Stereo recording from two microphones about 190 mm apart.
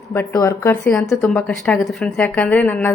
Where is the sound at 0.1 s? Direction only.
15° left (ahead or behind).